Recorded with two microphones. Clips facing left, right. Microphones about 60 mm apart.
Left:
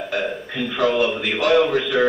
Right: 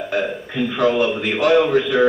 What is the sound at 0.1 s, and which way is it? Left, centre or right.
A man's voice, centre.